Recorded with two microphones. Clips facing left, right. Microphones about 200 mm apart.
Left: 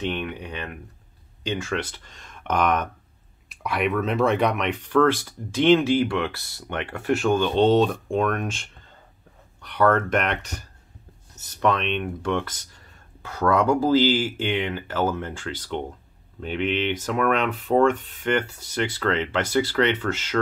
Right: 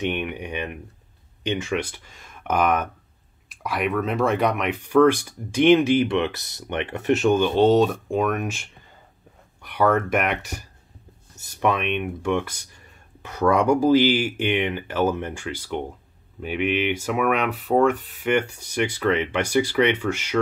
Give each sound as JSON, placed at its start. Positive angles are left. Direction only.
{"t": 0.0, "sound": "a sound", "side_deg": -15}
{"t": 1.4, "sound": "speech", "side_deg": -20}
{"t": 7.5, "sound": "speech", "side_deg": -5}